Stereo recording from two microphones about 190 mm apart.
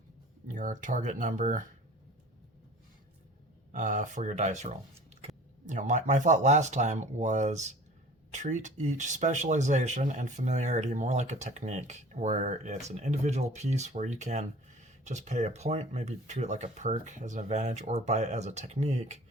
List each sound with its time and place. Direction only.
0.4 s speech: 40° right (ahead or behind)
3.7 s speech: 40° right (ahead or behind)